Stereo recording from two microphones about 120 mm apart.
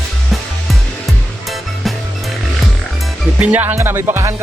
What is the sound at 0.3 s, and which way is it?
Music, centre (ahead or behind).